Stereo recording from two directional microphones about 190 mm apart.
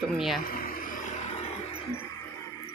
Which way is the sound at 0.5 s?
45° left (ahead or behind).